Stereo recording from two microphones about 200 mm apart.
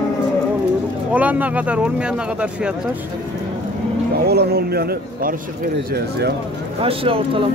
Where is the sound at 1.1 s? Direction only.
10° right (ahead or behind).